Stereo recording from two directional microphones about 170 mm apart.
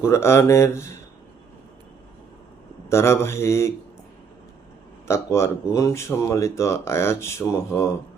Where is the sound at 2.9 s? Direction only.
15° left (ahead or behind).